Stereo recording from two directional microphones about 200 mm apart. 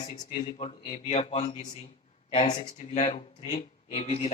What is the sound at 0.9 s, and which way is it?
A man's voice, 30° left (ahead or behind).